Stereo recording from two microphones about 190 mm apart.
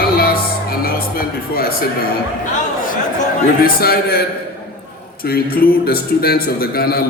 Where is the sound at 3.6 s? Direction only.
55° left (ahead or behind).